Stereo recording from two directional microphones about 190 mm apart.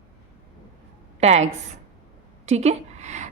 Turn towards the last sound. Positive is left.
turn(degrees=-35)  # may be behind; listen again after turning